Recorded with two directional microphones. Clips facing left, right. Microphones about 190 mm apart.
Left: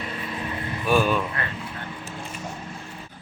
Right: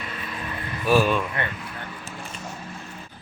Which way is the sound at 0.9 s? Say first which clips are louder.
Right 1 dB; centre (ahead or behind).